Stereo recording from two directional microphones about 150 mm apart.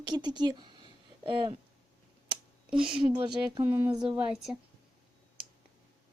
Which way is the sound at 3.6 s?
15° right (ahead or behind).